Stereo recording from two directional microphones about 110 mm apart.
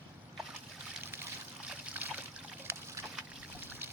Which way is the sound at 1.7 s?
15° right (ahead or behind).